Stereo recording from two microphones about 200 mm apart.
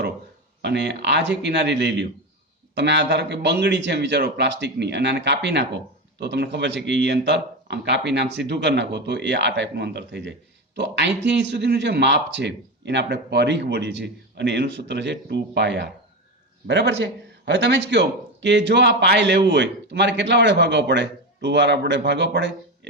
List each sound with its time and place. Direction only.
0.6 s speech: 60° right (ahead or behind)